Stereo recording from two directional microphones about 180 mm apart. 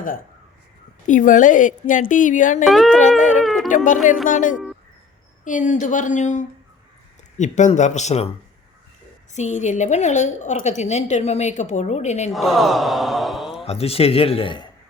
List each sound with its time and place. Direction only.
1.0 s a woman's voice: 45° left (ahead or behind)
2.6 s speech: centre (ahead or behind)
3.8 s a woman's voice: 45° left (ahead or behind)
9.3 s a woman's voice: 40° left (ahead or behind)
12.3 s speech: centre (ahead or behind)
13.7 s a woman's voice: 35° left (ahead or behind)